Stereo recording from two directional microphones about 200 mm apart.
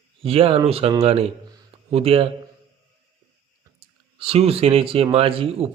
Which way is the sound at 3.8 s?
30° right (ahead or behind).